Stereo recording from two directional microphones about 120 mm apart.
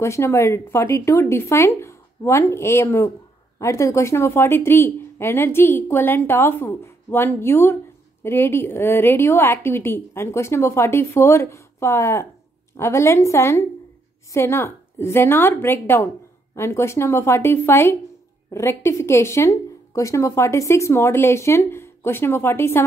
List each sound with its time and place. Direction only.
0.0 s a woman's voice: 20° left (ahead or behind)